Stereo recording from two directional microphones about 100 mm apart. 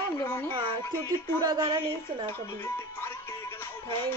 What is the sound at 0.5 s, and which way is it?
A woman's voice, 55° right (ahead or behind).